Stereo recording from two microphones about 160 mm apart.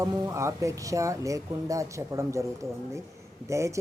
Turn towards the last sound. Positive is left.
turn(degrees=-20)  # may be behind; listen again after turning